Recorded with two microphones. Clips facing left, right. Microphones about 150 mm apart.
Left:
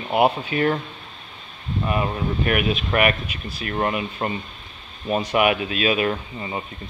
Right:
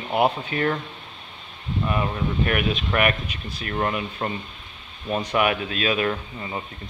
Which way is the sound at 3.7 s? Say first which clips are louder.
Left 2 dB; 15° left (ahead or behind).